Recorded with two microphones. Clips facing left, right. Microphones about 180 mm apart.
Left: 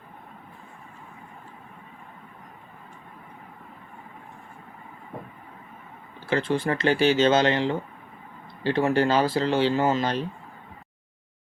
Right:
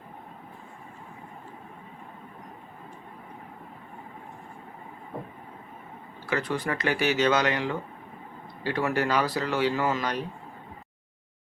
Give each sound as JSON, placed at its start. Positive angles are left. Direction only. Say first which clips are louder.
{"t": 6.2, "sound": "speech", "louder": "left 4 dB", "side_deg": 30}